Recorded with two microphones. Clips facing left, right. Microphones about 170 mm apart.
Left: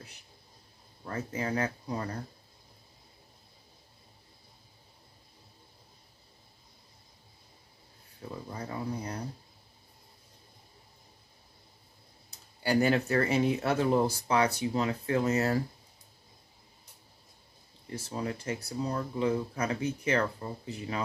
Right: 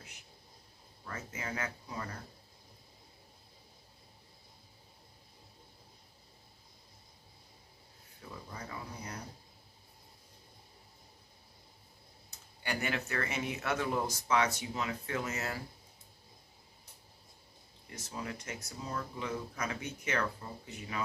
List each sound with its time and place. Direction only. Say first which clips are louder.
1.0 s speech: left 8 dB; 35° left (ahead or behind)
8.5 s speech: left 9 dB; 30° left (ahead or behind)
12.6 s speech: left 10 dB; 35° left (ahead or behind)
17.9 s speech: left 7 dB; 30° left (ahead or behind)